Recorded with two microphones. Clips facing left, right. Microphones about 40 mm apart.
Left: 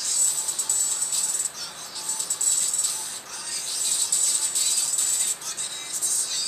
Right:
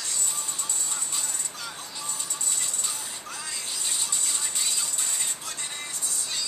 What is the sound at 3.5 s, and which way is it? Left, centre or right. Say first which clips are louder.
Music: left 2 dB; right.